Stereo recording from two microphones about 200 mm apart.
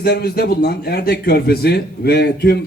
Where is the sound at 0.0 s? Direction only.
50° left (ahead or behind).